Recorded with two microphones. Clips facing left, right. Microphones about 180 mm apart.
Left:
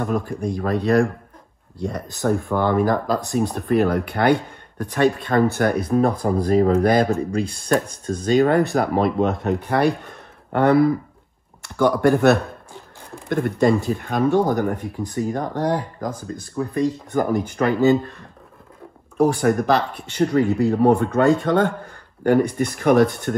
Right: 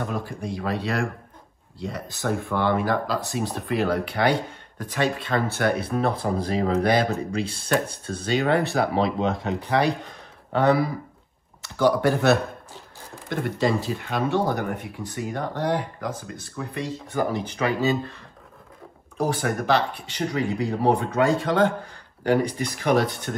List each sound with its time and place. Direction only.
0.0 s speech: 50° left (ahead or behind)
2.2 s speech: 40° left (ahead or behind)
5.9 s speech: 40° left (ahead or behind)
8.7 s speech: 50° left (ahead or behind)
17.1 s speech: 60° left (ahead or behind)